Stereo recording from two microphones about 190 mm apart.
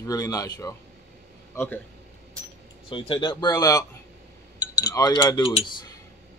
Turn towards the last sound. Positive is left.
turn(degrees=25)  # may be behind; listen again after turning